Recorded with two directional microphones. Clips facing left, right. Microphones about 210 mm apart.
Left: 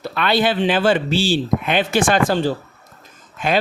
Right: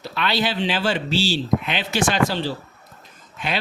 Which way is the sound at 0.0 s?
55° left (ahead or behind).